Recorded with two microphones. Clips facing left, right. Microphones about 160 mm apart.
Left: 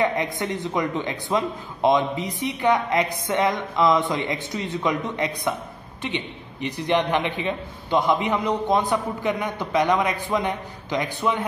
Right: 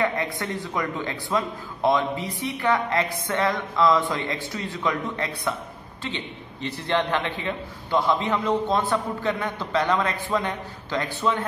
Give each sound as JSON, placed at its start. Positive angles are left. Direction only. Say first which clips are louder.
{"t": 0.0, "sound": "a man's voice", "louder": "left 2 dB", "side_deg": 20}